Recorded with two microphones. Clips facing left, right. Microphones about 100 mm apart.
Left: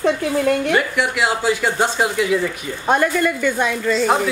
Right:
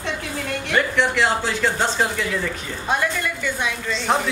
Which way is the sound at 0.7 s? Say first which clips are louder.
Left 1 dB; 10° left (ahead or behind).